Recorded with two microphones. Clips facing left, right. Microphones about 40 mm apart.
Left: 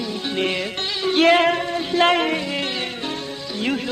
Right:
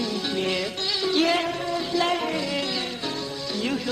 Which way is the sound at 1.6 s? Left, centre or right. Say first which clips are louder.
Left 6 dB; left.